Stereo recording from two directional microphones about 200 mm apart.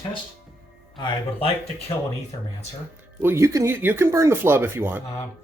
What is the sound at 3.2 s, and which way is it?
Speech, 15° right (ahead or behind).